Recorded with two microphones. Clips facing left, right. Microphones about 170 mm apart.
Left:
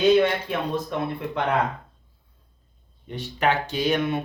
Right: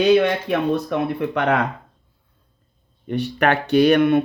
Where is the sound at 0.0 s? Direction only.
75° right (ahead or behind).